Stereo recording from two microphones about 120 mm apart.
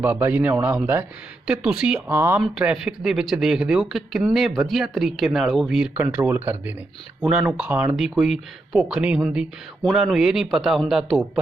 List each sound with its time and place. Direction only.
0.0 s a man's voice: 15° right (ahead or behind)
2.0 s speech: 20° right (ahead or behind)
2.4 s a man's voice: 5° right (ahead or behind)